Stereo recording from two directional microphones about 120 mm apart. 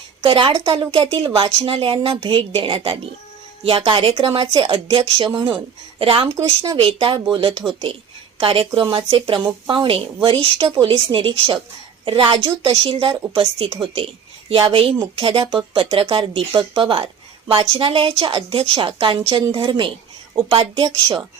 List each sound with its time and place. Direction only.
0.3 s a woman's voice: 45° right (ahead or behind)